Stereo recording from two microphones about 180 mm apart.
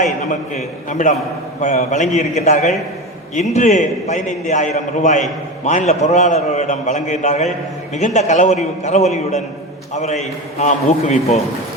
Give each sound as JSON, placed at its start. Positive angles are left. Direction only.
{"t": 0.0, "sound": "a man's voice", "side_deg": 45}